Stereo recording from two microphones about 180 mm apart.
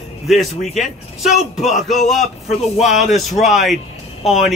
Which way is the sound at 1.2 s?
Centre (ahead or behind).